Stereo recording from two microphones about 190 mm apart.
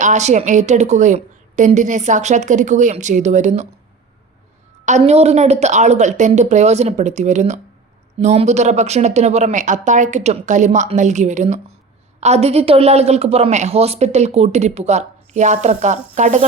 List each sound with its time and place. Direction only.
0.0 s a woman's voice: 40° right (ahead or behind)
4.9 s a woman's voice: 35° right (ahead or behind)